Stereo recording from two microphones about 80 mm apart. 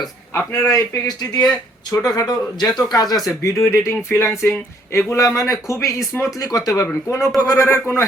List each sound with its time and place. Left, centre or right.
0.3 s a man's voice: left
0.7 s speech: left
1.9 s a man's voice: left
3.2 s a man's voice: left